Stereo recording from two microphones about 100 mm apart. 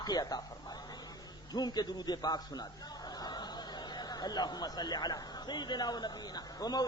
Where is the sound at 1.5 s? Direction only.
45° left (ahead or behind).